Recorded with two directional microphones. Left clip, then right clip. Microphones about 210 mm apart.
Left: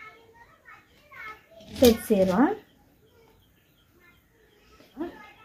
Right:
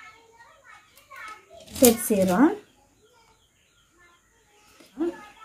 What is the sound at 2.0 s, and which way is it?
Speech, 15° left (ahead or behind).